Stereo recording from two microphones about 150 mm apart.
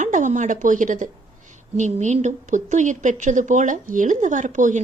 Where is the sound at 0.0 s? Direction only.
55° right (ahead or behind).